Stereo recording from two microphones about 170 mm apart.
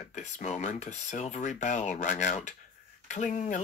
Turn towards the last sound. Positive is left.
turn(degrees=45)  # may be behind; listen again after turning